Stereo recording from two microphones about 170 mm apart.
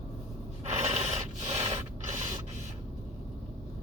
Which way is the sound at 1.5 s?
40° right (ahead or behind).